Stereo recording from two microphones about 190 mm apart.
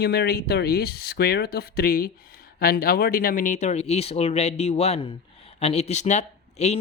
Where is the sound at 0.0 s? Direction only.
55° left (ahead or behind).